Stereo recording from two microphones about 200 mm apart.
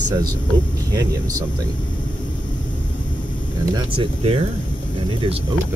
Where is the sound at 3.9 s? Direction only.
30° right (ahead or behind).